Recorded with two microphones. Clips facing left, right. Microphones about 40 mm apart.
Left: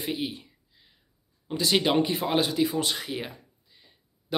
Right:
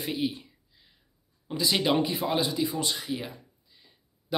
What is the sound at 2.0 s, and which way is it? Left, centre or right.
Speech, left.